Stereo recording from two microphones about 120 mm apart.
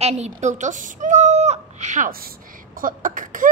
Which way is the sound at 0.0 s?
75° right (ahead or behind).